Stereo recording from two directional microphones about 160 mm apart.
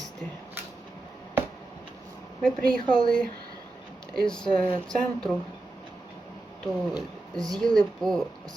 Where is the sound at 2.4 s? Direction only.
5° left (ahead or behind).